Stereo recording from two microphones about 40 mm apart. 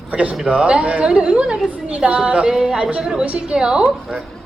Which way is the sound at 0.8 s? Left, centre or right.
Right.